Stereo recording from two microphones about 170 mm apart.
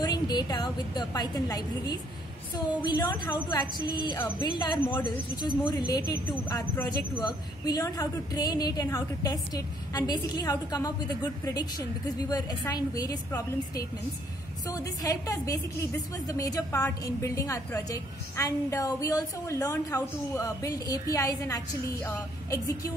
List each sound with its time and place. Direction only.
0.0 s a woman's voice: 25° left (ahead or behind)